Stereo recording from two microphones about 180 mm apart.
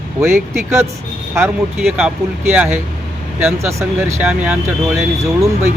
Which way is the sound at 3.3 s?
10° right (ahead or behind).